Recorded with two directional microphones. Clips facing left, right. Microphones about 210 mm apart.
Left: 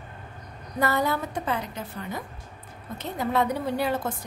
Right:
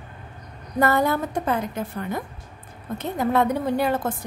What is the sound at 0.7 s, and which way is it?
A woman's voice, 50° right (ahead or behind).